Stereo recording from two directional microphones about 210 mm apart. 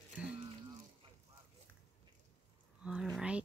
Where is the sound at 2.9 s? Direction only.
Centre (ahead or behind).